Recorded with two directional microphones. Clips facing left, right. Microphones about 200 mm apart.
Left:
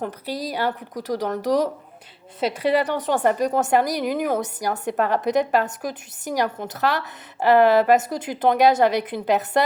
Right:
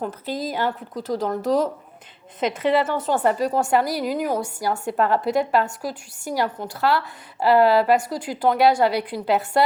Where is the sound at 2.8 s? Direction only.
15° left (ahead or behind).